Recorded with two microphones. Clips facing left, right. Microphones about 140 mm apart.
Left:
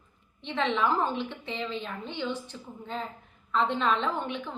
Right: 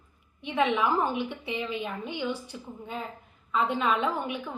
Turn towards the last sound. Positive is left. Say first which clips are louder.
# right 1 dB
turn(degrees=-10)  # may be behind; listen again after turning